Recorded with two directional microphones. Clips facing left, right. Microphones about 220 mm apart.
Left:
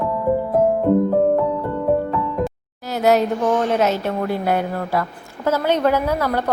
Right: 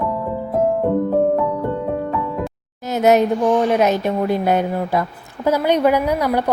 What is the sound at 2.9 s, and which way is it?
Speech, 20° right (ahead or behind).